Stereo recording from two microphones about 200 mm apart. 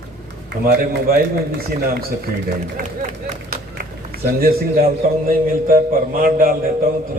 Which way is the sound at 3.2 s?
50° right (ahead or behind).